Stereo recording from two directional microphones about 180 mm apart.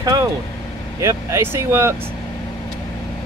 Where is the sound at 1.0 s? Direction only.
15° right (ahead or behind).